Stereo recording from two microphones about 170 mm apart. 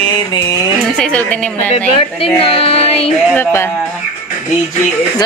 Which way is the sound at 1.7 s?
35° left (ahead or behind).